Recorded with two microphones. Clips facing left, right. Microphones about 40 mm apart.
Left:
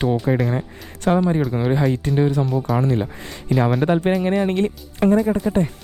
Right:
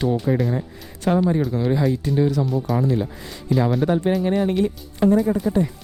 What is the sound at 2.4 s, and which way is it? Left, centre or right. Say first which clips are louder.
Speech: left 1 dB; centre.